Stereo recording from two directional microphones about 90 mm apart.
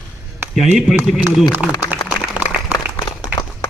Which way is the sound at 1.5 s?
20° right (ahead or behind).